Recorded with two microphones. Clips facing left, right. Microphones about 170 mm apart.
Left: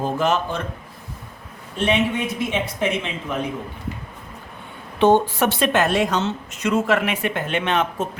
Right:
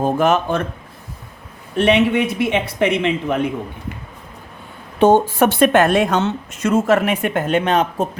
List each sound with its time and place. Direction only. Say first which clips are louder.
0.0 s speech: right 5 dB; 55° right (ahead or behind)
1.7 s speech: right 6 dB; 65° right (ahead or behind)
4.9 s speech: right 3 dB; 45° right (ahead or behind)